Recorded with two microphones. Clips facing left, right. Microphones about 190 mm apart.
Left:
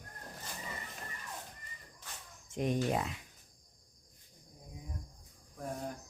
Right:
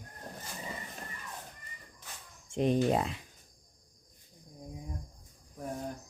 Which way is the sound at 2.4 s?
30° right (ahead or behind).